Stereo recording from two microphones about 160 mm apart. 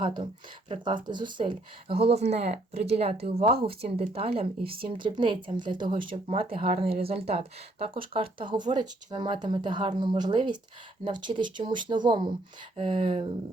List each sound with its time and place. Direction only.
0.0 s speech: 30° right (ahead or behind)